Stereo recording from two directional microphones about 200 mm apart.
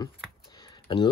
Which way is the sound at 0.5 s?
20° left (ahead or behind).